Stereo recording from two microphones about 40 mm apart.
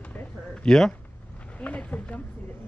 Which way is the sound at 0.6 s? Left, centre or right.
Centre.